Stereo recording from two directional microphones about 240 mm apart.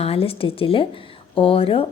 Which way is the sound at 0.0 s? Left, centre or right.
Left.